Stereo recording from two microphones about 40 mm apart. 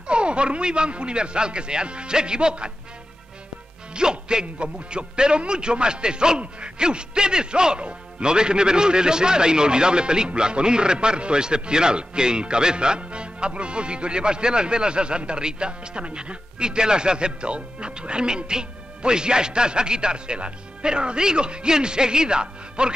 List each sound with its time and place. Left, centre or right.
0.0 s speech: right
3.9 s speech: right